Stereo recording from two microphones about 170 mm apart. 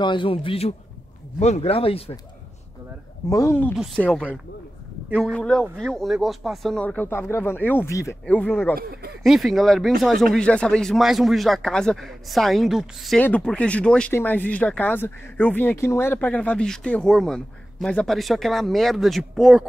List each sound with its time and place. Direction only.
0.0 s speech: 30° left (ahead or behind)
3.3 s speech: 15° left (ahead or behind)
3.7 s speech: centre (ahead or behind)
8.7 s speech: 70° right (ahead or behind)
9.2 s speech: centre (ahead or behind)